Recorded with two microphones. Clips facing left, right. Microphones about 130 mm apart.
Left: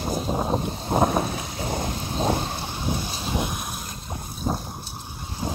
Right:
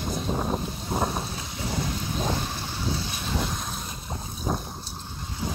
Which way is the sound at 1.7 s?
35° left (ahead or behind).